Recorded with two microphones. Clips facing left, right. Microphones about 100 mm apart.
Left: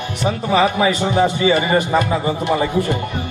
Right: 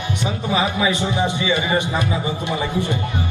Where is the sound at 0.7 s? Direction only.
50° left (ahead or behind).